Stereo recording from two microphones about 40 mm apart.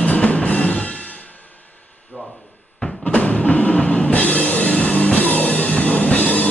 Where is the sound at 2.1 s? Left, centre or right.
Left.